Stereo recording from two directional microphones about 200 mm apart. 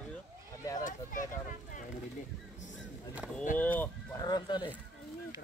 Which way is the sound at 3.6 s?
10° left (ahead or behind).